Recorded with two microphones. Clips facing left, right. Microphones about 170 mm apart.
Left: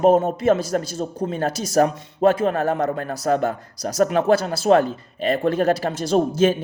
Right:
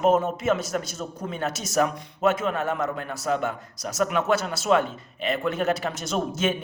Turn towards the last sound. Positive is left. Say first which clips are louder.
# left 8 dB
turn(degrees=35)  # may be behind; listen again after turning